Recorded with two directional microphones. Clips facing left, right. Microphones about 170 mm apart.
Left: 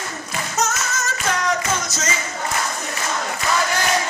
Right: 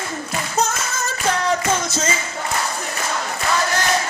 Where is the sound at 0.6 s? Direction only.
30° right (ahead or behind).